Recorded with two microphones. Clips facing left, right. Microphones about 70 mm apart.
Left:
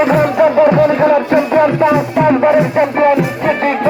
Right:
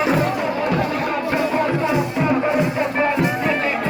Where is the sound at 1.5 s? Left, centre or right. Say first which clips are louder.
Left 11 dB; left.